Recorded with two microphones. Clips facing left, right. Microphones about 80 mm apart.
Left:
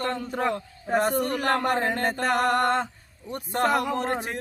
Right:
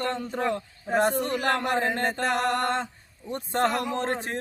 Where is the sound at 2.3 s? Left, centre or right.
Left.